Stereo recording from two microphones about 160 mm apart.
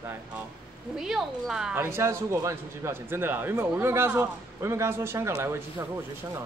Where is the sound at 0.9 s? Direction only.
Centre (ahead or behind).